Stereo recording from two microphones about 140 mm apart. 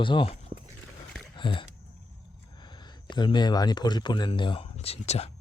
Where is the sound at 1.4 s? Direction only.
35° left (ahead or behind).